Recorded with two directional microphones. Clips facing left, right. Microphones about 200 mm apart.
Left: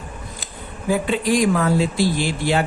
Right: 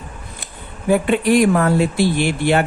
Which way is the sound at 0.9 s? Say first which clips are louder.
Right 4 dB; 60° right (ahead or behind).